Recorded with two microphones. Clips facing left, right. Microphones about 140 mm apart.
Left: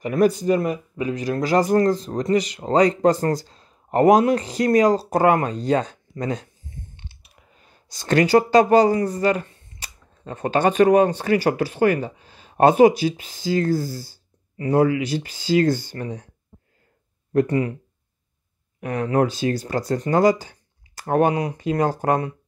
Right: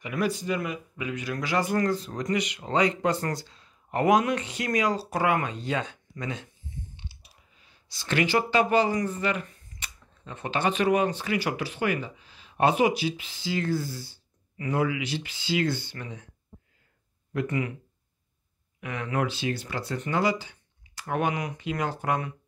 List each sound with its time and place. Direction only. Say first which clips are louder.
0.0 s speech: left 10 dB; 40° left (ahead or behind)
7.0 s clicking: left 1 dB; 55° left (ahead or behind); by 9.8 s 30° left (ahead or behind)
10.2 s speech: left 8 dB; 45° left (ahead or behind)
17.3 s speech: left 9 dB; 40° left (ahead or behind)
18.8 s speech: left 9 dB; 40° left (ahead or behind)